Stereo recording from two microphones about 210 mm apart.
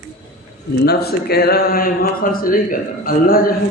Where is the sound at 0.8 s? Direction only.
50° left (ahead or behind).